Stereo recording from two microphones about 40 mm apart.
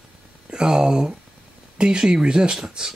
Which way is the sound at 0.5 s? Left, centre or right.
Centre.